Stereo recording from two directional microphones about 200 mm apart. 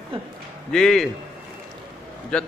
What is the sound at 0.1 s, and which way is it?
Speech, 25° right (ahead or behind).